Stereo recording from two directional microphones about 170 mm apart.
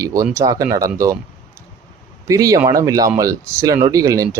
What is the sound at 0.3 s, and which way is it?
Speech, 20° right (ahead or behind).